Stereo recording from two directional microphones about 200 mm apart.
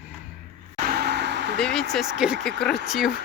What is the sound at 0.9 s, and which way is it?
Vehicle, 55° right (ahead or behind).